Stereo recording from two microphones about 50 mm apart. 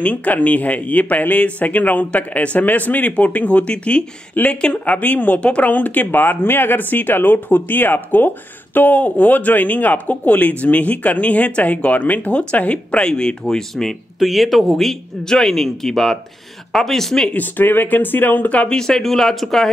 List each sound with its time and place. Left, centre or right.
0.0 s speech: left
4.4 s speech: left; by 13.9 s centre
14.2 s speech: centre
17.3 s speech: left
18.7 s speech: centre